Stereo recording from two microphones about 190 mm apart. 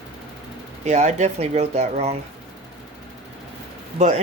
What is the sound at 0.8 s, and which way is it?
Speech, 35° right (ahead or behind).